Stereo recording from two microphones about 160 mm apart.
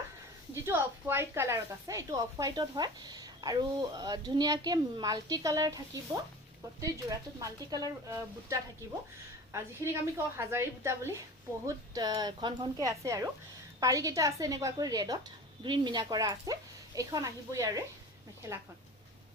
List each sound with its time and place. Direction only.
0.6 s a woman's voice: 15° right (ahead or behind)